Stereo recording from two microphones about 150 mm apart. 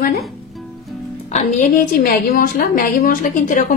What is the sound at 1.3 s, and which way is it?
A woman's voice, 60° left (ahead or behind).